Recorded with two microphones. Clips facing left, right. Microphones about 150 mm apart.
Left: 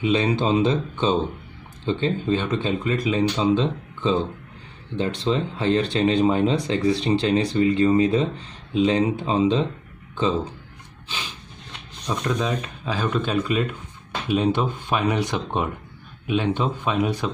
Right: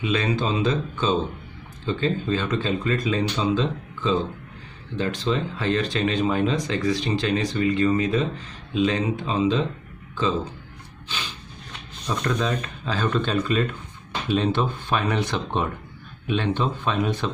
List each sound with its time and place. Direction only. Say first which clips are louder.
0.0 s speech: left 3 dB; 25° left (ahead or behind)
12.1 s speech: even; 15° left (ahead or behind)